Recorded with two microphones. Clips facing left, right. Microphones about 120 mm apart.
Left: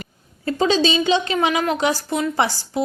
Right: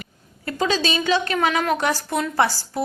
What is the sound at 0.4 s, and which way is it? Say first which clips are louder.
A woman's voice: left 4 dB; 25° left (ahead or behind).